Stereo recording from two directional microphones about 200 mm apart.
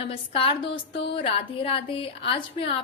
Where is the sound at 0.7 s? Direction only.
60° left (ahead or behind).